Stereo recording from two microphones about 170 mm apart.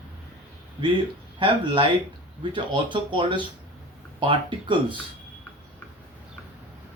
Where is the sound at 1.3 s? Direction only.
30° right (ahead or behind).